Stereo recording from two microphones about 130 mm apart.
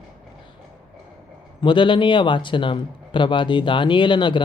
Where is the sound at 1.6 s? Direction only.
40° left (ahead or behind).